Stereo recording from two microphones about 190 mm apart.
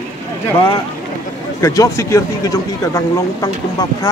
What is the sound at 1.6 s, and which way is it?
Speech, 15° left (ahead or behind).